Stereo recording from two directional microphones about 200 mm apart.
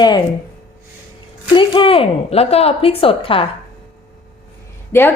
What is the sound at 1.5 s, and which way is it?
A woman's voice, 25° left (ahead or behind).